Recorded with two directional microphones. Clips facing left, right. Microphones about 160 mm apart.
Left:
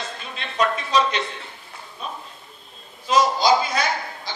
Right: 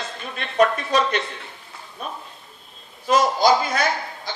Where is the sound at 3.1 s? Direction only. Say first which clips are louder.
Right 1 dB; 50° right (ahead or behind).